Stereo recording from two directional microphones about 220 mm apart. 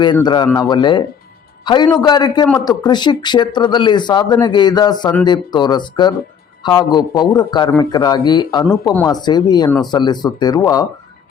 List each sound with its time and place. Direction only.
0.0 s a man's voice: 20° left (ahead or behind)
9.6 s a man's voice: 5° left (ahead or behind)
9.9 s speech: 20° left (ahead or behind)